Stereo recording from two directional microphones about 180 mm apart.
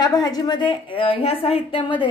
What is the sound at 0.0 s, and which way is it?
A woman's voice, 20° left (ahead or behind).